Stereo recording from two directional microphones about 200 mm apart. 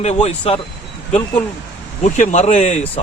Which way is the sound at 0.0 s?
35° left (ahead or behind).